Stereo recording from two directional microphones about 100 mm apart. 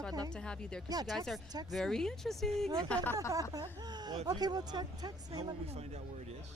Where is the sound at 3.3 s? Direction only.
35° right (ahead or behind).